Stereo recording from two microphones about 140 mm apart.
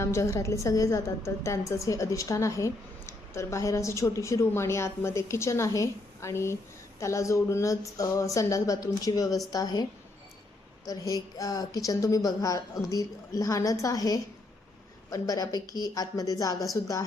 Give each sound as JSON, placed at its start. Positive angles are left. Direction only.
{"t": 0.0, "sound": "a woman's voice", "side_deg": 20}
{"t": 10.8, "sound": "a woman's voice", "side_deg": 25}